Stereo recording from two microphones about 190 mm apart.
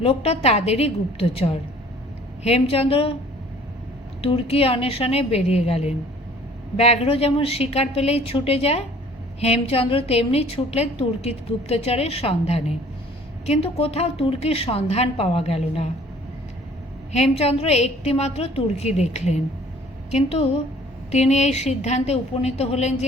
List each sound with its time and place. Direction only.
0.0 s a woman's voice: 30° left (ahead or behind)
2.4 s a woman's voice: 30° left (ahead or behind)
4.2 s a woman's voice: 30° left (ahead or behind)
17.1 s a woman's voice: 35° left (ahead or behind)